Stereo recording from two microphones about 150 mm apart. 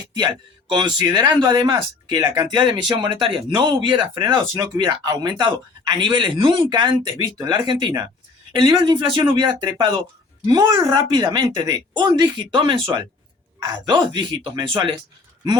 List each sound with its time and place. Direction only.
0.0 s a woman's voice: 25° right (ahead or behind)